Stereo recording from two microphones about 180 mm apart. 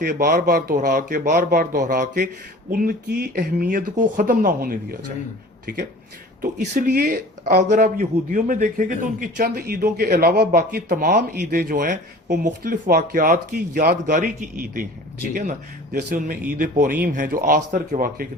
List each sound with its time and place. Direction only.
0.0 s a man's voice: 55° right (ahead or behind)
16.6 s a man's voice: 45° right (ahead or behind)